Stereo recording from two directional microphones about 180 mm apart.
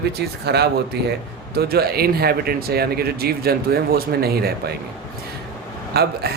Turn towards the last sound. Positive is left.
turn(degrees=-60)  # may be behind; listen again after turning